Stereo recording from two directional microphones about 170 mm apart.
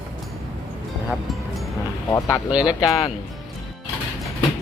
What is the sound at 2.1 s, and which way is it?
Speech, 15° left (ahead or behind).